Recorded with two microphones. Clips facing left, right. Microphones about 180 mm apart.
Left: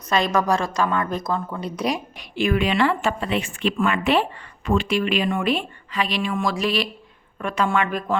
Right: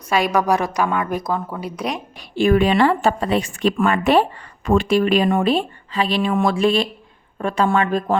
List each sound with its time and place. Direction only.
0.1 s a woman's voice: 15° right (ahead or behind)
2.4 s a woman's voice: 35° right (ahead or behind)